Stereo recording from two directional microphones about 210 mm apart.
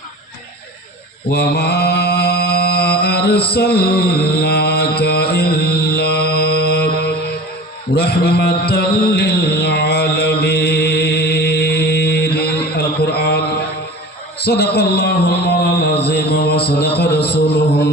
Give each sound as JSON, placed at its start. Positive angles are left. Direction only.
{"t": 1.3, "sound": "mantra", "side_deg": 50}
{"t": 14.3, "sound": "a man's voice", "side_deg": 50}